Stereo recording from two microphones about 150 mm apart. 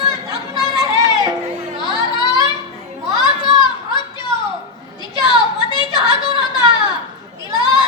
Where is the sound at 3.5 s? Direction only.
30° left (ahead or behind).